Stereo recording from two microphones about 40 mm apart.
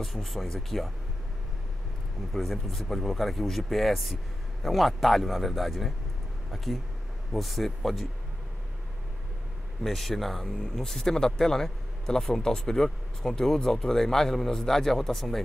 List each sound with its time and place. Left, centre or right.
0.0 s speech: centre
2.3 s speech: centre
9.8 s speech: centre
10.6 s speech: centre